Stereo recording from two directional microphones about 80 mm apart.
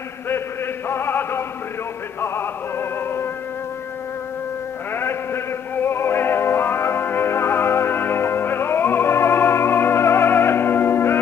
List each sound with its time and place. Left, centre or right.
0.8 s music: left
4.9 s a sound: left
5.9 s music: left